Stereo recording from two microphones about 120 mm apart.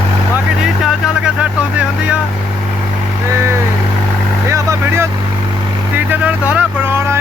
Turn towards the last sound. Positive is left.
turn(degrees=-10)  # may be behind; listen again after turning